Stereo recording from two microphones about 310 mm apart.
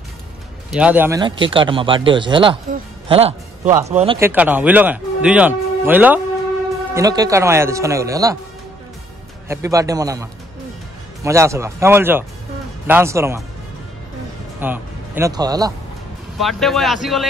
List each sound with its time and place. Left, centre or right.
0.7 s a man's voice: centre
4.2 s speech: centre
9.5 s speech: centre
11.2 s speech: centre
14.6 s speech: centre
16.3 s speech: centre